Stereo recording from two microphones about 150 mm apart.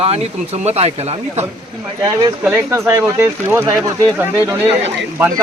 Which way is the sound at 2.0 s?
30° right (ahead or behind).